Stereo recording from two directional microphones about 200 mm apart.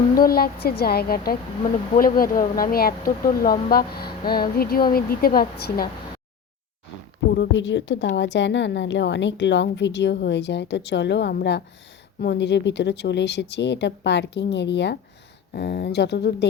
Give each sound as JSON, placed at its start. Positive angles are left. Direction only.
{"t": 0.1, "sound": "speech", "side_deg": 45}
{"t": 7.3, "sound": "a woman's voice", "side_deg": 65}